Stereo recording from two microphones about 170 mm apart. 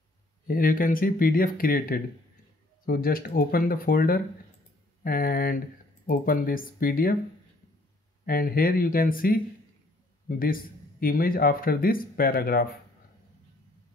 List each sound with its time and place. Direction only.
0.5 s speech: 60° left (ahead or behind)
8.3 s speech: 60° left (ahead or behind)